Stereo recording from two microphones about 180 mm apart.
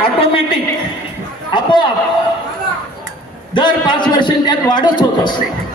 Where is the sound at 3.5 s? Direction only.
25° left (ahead or behind).